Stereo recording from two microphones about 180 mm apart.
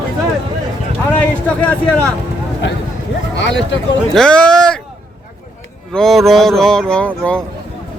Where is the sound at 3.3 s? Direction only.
80° left.